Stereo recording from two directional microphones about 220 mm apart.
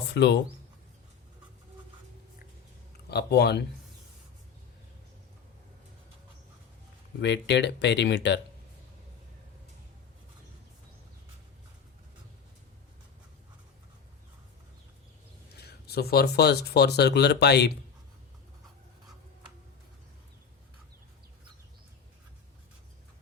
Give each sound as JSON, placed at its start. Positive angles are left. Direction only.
{"t": 0.1, "sound": "speech", "side_deg": 50}
{"t": 3.1, "sound": "speech", "side_deg": 50}
{"t": 7.2, "sound": "speech", "side_deg": 50}
{"t": 15.5, "sound": "speech", "side_deg": 45}